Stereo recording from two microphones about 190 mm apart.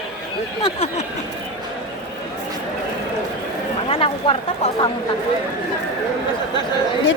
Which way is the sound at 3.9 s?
30° left (ahead or behind).